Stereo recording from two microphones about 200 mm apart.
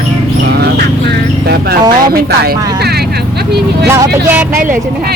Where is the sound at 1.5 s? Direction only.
55° right (ahead or behind).